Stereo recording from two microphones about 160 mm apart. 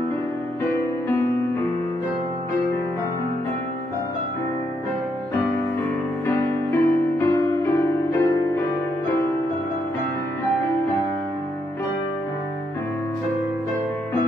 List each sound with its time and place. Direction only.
0.7 s music: 15° left (ahead or behind)
6.2 s music: 15° left (ahead or behind)